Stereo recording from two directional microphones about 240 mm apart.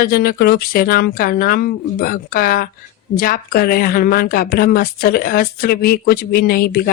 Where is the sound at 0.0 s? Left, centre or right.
Left.